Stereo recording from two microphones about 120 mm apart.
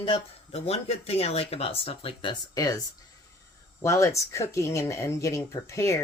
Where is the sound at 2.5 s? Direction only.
35° left (ahead or behind).